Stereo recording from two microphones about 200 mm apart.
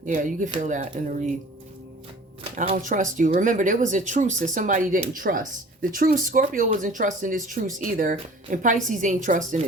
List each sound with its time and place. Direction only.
0.0 s speech: 40° right (ahead or behind)
2.4 s speech: 35° right (ahead or behind)